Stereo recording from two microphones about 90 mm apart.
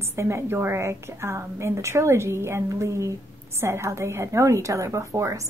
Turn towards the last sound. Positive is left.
turn(degrees=-35)  # may be behind; listen again after turning